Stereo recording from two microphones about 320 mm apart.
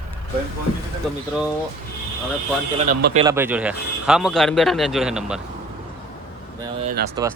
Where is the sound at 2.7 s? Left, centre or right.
Right.